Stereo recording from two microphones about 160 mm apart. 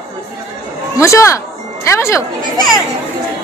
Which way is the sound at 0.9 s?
20° left (ahead or behind).